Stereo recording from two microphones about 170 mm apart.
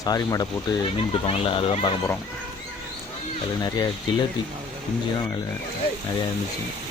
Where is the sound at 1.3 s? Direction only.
35° left (ahead or behind).